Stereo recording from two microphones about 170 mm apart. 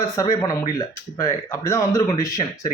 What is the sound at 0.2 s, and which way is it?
A man's voice, 20° left (ahead or behind).